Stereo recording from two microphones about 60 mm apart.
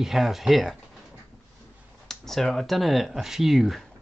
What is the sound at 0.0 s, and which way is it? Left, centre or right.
Speech, centre.